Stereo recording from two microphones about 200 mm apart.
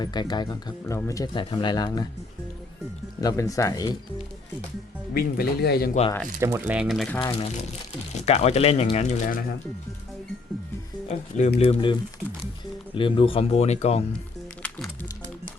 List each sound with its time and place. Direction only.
0.0 s speech: 20° left (ahead or behind)
3.2 s speech: 15° left (ahead or behind)
5.1 s speech: 50° left (ahead or behind)
6.4 s speech: 10° right (ahead or behind)
7.2 s speech: 25° left (ahead or behind)
11.1 s speech: 35° left (ahead or behind)